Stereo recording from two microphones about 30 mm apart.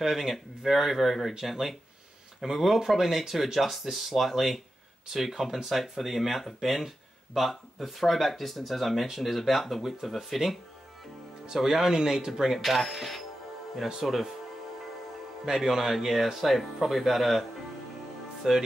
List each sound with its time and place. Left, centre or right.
0.1 s speech: centre
11.9 s speech: right
12.5 s speech: centre
15.5 s speech: centre
18.4 s speech: centre